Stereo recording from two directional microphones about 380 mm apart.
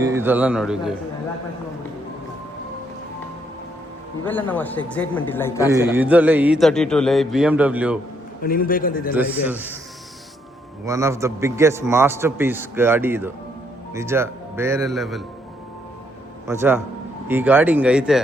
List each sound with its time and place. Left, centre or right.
0.0 s a man's voice: centre
4.3 s a man's voice: centre
5.6 s a man's voice: centre
8.4 s a man's voice: left
9.1 s a man's voice: centre
10.8 s a man's voice: centre
16.5 s a man's voice: centre